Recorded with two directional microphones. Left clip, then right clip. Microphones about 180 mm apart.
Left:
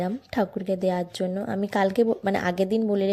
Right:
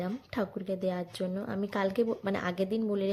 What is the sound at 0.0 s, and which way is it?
A woman's voice, 30° left (ahead or behind).